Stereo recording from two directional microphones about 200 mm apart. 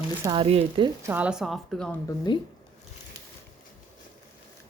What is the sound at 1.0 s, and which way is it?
Speech, 5° right (ahead or behind).